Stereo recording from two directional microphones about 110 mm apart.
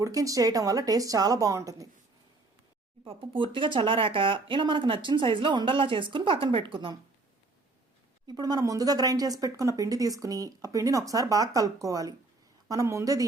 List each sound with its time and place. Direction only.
0.0 s speech: 30° right (ahead or behind)
3.0 s speech: 50° right (ahead or behind)
8.3 s speech: 35° right (ahead or behind)